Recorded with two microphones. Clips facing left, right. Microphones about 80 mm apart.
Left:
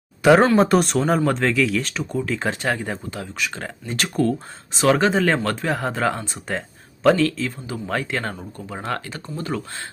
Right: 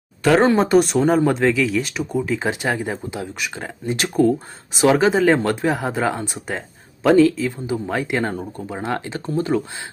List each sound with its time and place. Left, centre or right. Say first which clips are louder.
0.2 s speech: left 2 dB; centre
0.5 s speech: right 1 dB; centre
3.2 s speech: right 1 dB; centre